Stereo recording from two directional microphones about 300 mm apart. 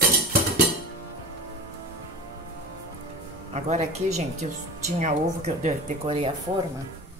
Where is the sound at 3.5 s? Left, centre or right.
Right.